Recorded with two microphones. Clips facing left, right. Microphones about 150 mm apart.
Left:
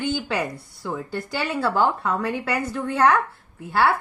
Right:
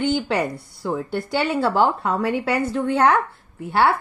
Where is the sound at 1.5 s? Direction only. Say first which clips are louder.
Right 1 dB; 25° right (ahead or behind).